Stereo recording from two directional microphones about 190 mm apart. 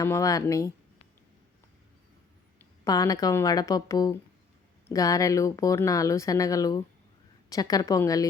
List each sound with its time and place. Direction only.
0.0 s speech: 15° left (ahead or behind)
2.8 s a woman's voice: 20° left (ahead or behind)